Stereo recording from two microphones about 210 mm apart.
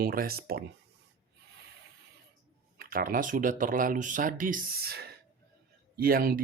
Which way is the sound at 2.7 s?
45° right (ahead or behind).